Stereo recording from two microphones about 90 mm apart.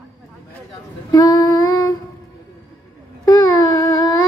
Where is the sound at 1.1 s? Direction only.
45° left (ahead or behind).